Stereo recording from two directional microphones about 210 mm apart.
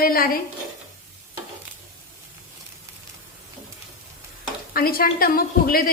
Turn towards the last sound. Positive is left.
turn(degrees=45)  # may be behind; listen again after turning